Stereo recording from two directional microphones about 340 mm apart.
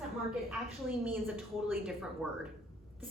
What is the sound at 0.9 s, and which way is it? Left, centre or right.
A woman's voice, centre.